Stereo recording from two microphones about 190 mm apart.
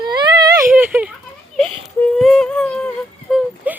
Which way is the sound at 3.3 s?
Centre (ahead or behind).